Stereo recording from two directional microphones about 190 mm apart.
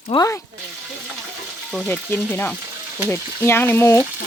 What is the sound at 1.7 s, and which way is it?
Speech, 5° left (ahead or behind).